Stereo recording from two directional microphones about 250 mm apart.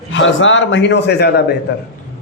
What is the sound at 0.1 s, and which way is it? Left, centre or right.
A man's voice, left.